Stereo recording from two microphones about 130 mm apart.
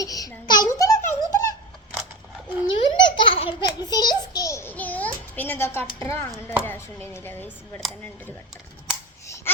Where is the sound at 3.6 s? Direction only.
30° left (ahead or behind).